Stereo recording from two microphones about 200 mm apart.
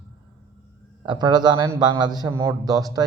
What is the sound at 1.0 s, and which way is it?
A man's voice, 20° right (ahead or behind).